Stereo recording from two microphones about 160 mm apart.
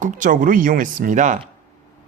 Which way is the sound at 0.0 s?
55° right (ahead or behind).